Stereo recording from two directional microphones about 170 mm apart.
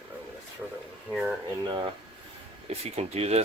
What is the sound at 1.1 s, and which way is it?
Speech, 10° right (ahead or behind).